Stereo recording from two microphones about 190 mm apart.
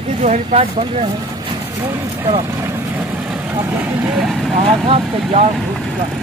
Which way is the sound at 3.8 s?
5° right (ahead or behind).